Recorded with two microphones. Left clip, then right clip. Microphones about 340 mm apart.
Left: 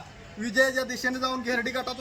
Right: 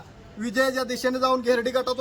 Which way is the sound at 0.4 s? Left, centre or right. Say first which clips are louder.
Even; centre.